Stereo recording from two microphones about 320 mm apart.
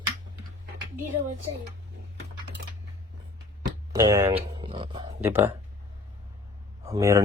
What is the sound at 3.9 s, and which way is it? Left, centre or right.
Speech, centre.